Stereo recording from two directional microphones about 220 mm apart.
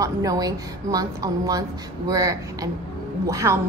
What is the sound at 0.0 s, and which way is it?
A woman's voice, 15° right (ahead or behind).